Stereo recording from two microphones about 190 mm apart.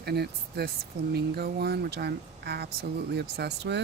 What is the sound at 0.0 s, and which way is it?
Speech, 55° right (ahead or behind).